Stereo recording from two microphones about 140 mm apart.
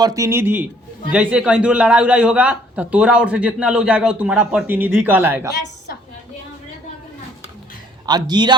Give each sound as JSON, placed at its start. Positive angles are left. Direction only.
{"t": 0.0, "sound": "a man's voice", "side_deg": -25}
{"t": 8.0, "sound": "a man's voice", "side_deg": -30}